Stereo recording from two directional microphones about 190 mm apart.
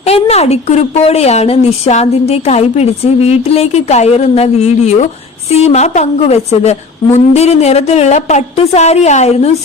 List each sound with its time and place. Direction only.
0.0 s a woman's voice: 35° left (ahead or behind)